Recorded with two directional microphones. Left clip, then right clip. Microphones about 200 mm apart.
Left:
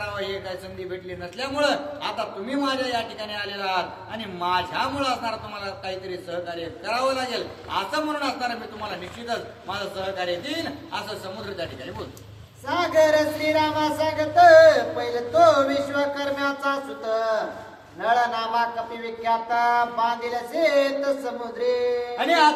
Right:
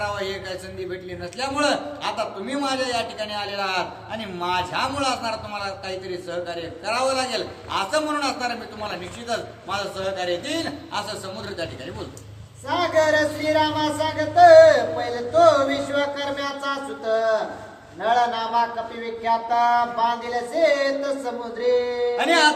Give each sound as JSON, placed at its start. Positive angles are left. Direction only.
{"t": 1.4, "sound": "a man's voice", "side_deg": -10}
{"t": 12.6, "sound": "a sound", "side_deg": 15}
{"t": 22.2, "sound": "a man's voice", "side_deg": -15}